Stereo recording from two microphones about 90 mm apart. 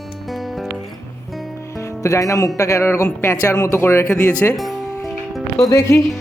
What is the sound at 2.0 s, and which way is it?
Speech, 35° left (ahead or behind).